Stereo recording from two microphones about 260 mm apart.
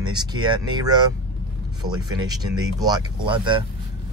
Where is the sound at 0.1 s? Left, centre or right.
Centre.